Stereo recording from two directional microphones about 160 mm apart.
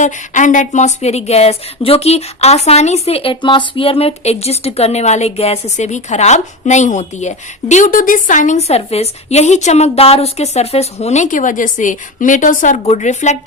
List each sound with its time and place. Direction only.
0.0 s speech: 50° left (ahead or behind)